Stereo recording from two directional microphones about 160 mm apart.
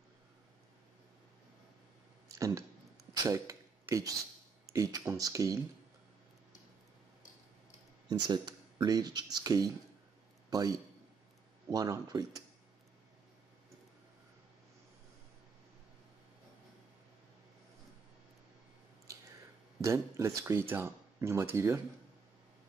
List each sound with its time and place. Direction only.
2.3 s speech: 20° right (ahead or behind)
3.2 s a sound: 20° right (ahead or behind)
4.7 s speech: 20° right (ahead or behind)
8.1 s a man's voice: 25° right (ahead or behind)
19.8 s speech: 20° right (ahead or behind)